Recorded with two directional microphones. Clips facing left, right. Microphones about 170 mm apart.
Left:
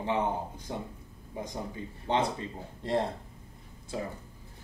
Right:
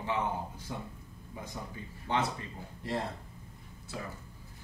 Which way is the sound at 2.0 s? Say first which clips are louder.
Left 4 dB; 25° left (ahead or behind).